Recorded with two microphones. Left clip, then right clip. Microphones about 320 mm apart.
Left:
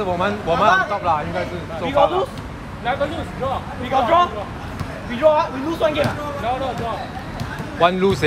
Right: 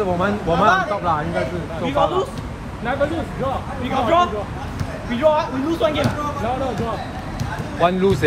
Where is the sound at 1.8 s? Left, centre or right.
Left.